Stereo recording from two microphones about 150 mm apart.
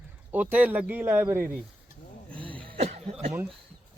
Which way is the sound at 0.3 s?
10° right (ahead or behind).